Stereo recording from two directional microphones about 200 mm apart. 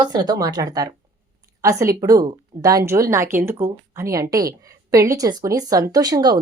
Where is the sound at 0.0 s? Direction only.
20° right (ahead or behind).